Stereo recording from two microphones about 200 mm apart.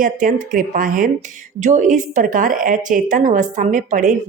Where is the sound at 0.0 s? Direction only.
40° right (ahead or behind).